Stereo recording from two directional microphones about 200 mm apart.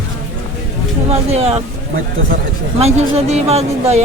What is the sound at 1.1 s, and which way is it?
Speech, 30° right (ahead or behind).